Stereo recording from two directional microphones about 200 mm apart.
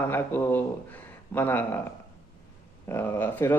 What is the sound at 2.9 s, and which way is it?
Speech, 10° left (ahead or behind).